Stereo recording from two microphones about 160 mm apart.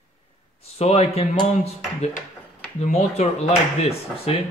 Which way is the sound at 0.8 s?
40° left (ahead or behind).